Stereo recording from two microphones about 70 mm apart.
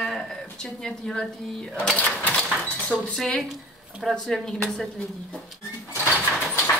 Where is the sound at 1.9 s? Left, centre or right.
Left.